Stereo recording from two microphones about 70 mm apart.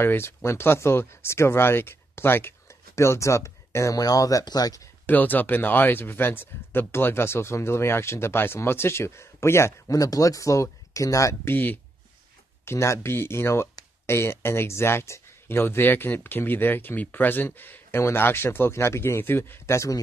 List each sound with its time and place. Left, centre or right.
0.0 s speech: left
3.0 s speech: left
4.0 s speech: left
5.0 s speech: left
11.5 s speech: left
12.6 s speech: left